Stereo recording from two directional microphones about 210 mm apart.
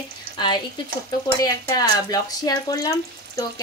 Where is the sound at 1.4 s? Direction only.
20° left (ahead or behind).